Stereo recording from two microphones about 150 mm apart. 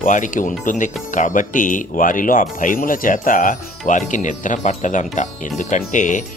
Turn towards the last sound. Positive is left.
turn(degrees=55)  # may be behind; listen again after turning